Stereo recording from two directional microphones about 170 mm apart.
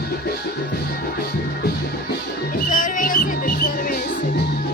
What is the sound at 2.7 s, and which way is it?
Music, 50° left (ahead or behind).